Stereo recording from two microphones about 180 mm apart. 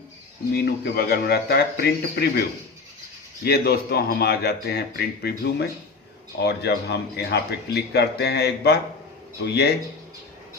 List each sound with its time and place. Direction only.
0.5 s speech: 60° left (ahead or behind)
3.4 s speech: 60° left (ahead or behind)